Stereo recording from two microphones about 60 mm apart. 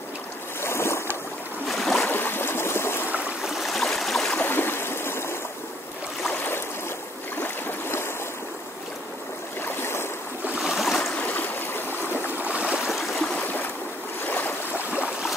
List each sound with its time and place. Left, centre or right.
0.6 s boat: left
1.7 s boat: centre
2.1 s stream: left
3.4 s stream: centre
4.4 s stream: left
7.3 s stream: left
9.8 s boat: left
10.6 s stream: centre
11.1 s stream: left
12.4 s stream: right
12.7 s stream: centre